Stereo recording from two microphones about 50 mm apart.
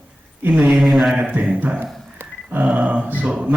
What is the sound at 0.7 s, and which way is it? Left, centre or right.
Speech, centre.